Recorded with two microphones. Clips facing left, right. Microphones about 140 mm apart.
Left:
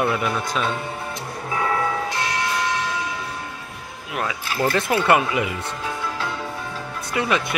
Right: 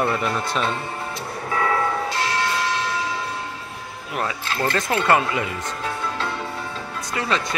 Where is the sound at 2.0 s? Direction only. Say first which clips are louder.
Right 1 dB; 20° left (ahead or behind).